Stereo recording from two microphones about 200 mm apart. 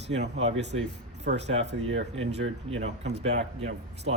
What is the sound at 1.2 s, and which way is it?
Speech, 60° right (ahead or behind).